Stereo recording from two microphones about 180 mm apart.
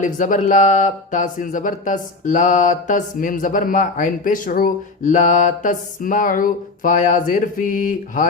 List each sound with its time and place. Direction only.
0.0 s speech: 45° left (ahead or behind)